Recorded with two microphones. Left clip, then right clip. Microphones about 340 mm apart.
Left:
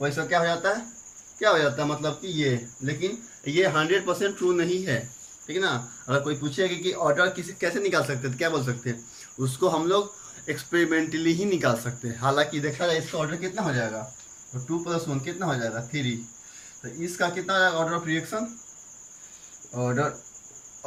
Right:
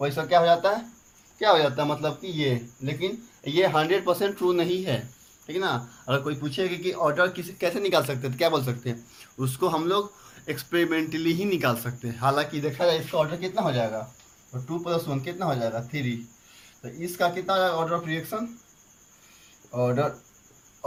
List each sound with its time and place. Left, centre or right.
0.0 s speech: centre